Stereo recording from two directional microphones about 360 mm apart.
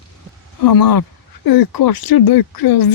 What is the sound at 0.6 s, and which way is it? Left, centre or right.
Speech, left.